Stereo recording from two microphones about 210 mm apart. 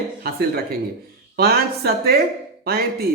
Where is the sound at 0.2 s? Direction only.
45° right (ahead or behind).